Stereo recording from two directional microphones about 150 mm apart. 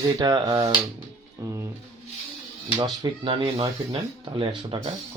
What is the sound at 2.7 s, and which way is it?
Speech, 30° right (ahead or behind).